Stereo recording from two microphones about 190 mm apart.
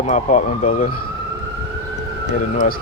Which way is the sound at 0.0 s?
40° left (ahead or behind).